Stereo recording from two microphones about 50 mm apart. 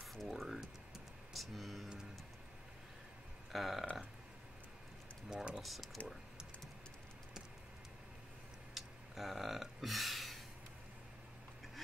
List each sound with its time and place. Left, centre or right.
0.0 s music: centre
0.3 s music: centre
3.5 s speech: centre
5.3 s speech: right
5.6 s speech: centre
8.7 s a sound: centre